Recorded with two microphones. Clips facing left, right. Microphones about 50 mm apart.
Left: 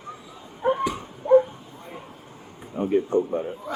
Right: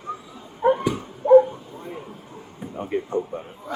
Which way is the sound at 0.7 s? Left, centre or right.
Centre.